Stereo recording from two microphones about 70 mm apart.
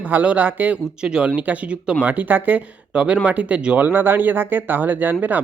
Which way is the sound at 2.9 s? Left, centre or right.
Centre.